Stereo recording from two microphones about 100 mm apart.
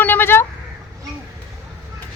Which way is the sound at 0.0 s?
20° left (ahead or behind).